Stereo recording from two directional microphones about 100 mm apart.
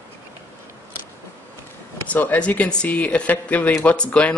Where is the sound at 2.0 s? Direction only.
15° left (ahead or behind).